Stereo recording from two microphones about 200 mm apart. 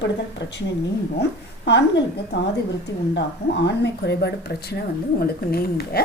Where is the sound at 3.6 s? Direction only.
60° left (ahead or behind).